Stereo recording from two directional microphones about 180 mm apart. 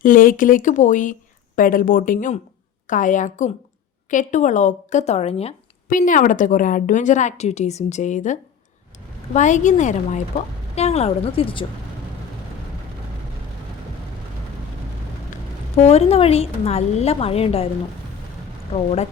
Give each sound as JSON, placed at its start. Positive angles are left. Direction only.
{"t": 0.0, "sound": "a woman's voice", "side_deg": 50}
{"t": 5.9, "sound": "a woman's voice", "side_deg": 45}
{"t": 15.3, "sound": "a woman's voice", "side_deg": 35}
{"t": 18.7, "sound": "speech", "side_deg": 35}